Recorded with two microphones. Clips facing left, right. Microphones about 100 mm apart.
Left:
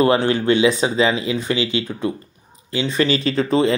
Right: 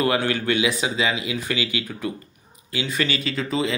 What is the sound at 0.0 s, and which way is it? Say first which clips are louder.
Speech: left 6 dB; 30° left (ahead or behind).